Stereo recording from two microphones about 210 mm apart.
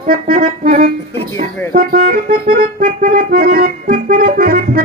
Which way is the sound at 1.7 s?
45° right (ahead or behind).